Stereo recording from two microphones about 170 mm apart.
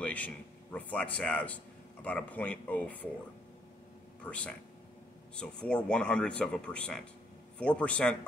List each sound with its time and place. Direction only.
0.0 s a man's voice: 10° left (ahead or behind)
4.2 s speech: 5° left (ahead or behind)